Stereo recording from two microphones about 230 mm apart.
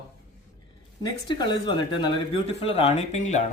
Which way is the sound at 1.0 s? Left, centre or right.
Centre.